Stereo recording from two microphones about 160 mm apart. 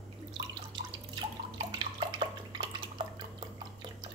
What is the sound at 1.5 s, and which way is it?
Bathtub, 30° right (ahead or behind).